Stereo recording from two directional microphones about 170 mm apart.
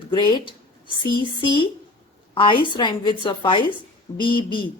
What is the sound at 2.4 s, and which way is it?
Speech, 30° left (ahead or behind).